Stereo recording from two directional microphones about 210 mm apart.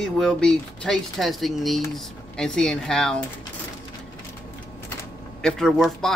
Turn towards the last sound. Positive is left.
turn(degrees=0)  # may be behind; listen again after turning